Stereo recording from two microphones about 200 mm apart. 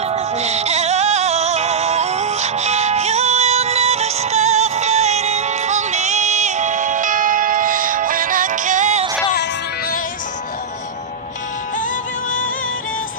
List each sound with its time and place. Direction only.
0.0 s music: 35° right (ahead or behind)
9.3 s music: 50° left (ahead or behind)